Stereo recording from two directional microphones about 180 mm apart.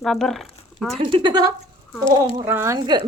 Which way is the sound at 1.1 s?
25° right (ahead or behind).